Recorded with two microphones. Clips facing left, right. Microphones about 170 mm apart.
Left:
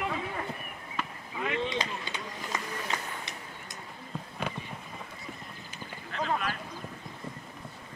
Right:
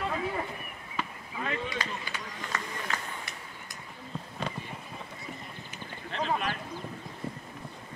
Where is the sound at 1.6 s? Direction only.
20° left (ahead or behind).